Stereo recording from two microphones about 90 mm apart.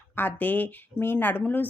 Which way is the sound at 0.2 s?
20° left (ahead or behind).